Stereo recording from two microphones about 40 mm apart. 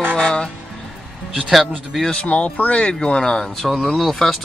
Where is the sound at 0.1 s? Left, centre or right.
Centre.